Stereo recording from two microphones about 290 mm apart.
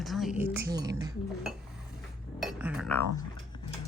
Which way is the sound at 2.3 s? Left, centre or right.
Centre.